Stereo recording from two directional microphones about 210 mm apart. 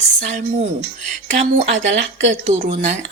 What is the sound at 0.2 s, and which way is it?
Speech, 35° right (ahead or behind).